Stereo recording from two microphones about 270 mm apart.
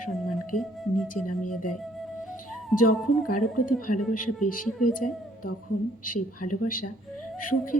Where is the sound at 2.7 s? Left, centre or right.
Left.